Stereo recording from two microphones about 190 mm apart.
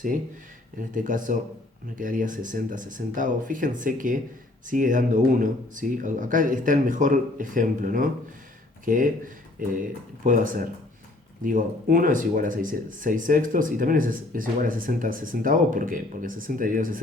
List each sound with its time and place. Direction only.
0.8 s speech: 45° right (ahead or behind)
10.2 s speech: 45° right (ahead or behind)